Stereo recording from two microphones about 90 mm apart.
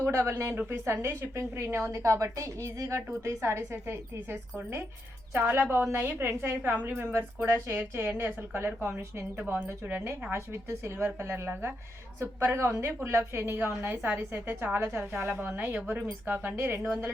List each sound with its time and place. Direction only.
0.0 s a woman's voice: 30° right (ahead or behind)
9.4 s a woman's voice: 15° right (ahead or behind)
14.3 s a woman's voice: 30° right (ahead or behind)
15.3 s a woman's voice: 15° right (ahead or behind); by 16.9 s 30° right (ahead or behind)